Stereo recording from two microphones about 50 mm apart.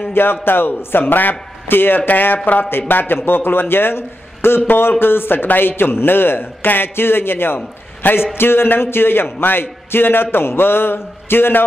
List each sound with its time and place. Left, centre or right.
0.1 s a man's voice: left